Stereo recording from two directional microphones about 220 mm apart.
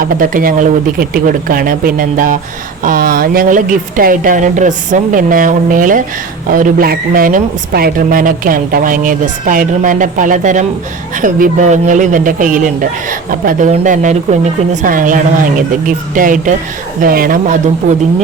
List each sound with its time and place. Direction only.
0.0 s speech: 40° right (ahead or behind)